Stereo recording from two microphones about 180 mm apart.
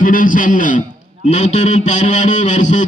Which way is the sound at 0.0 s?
50° left (ahead or behind).